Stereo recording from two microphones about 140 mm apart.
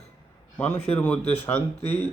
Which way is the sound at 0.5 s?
15° left (ahead or behind).